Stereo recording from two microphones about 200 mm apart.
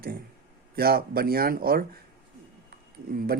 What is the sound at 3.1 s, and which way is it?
Speech, 50° right (ahead or behind).